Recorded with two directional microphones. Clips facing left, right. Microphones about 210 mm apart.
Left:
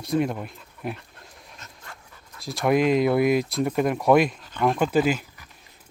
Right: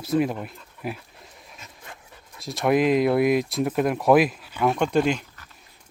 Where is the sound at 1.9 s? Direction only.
20° right (ahead or behind).